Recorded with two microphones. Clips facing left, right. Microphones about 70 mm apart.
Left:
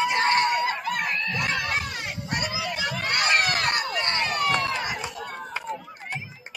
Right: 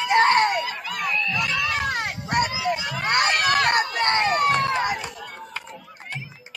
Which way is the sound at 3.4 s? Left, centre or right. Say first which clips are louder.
Right 5 dB; right.